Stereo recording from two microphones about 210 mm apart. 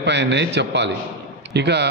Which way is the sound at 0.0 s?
55° right (ahead or behind).